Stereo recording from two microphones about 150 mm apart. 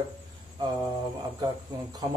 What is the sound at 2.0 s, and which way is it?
Speech, 25° right (ahead or behind).